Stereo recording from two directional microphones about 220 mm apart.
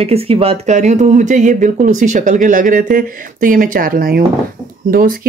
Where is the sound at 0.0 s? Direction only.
25° right (ahead or behind).